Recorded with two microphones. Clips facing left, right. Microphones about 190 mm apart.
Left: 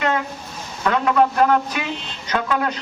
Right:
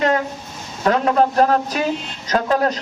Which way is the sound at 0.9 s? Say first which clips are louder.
Right 2 dB; 35° right (ahead or behind).